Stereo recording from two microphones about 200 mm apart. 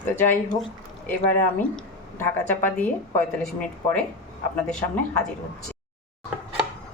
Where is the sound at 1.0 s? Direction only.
10° left (ahead or behind).